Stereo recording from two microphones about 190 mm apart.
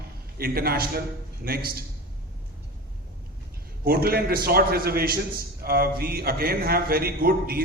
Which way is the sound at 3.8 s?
55° right (ahead or behind).